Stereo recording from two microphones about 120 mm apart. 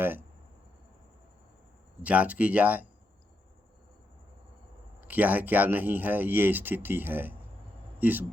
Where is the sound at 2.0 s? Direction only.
10° right (ahead or behind).